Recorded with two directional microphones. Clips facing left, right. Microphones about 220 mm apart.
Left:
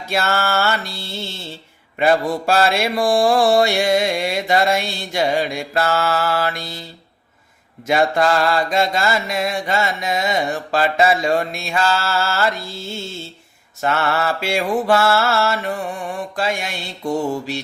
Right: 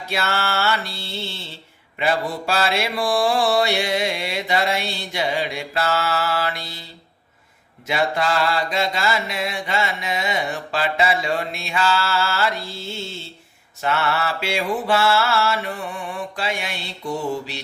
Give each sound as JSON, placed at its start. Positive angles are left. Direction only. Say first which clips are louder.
{"t": 0.1, "sound": "mantra", "louder": "left 4 dB", "side_deg": 45}
{"t": 7.9, "sound": "mantra", "louder": "left 5 dB", "side_deg": 45}
{"t": 13.8, "sound": "mantra", "louder": "left 3 dB", "side_deg": 45}